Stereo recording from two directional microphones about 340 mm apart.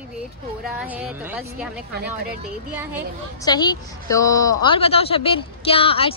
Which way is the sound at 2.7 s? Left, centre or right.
Centre.